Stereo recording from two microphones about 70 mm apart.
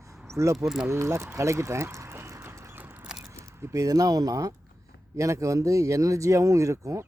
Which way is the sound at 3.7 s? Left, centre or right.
Right.